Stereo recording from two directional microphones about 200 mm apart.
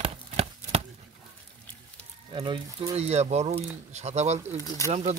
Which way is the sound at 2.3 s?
25° right (ahead or behind).